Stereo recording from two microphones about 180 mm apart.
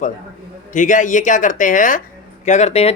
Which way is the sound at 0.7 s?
45° left (ahead or behind).